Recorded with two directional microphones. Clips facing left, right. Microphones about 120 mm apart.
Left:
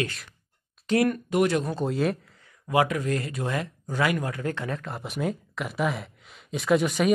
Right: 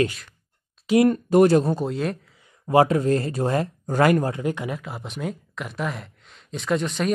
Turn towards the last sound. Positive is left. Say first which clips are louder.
# left 2 dB
turn(degrees=5)  # may be behind; listen again after turning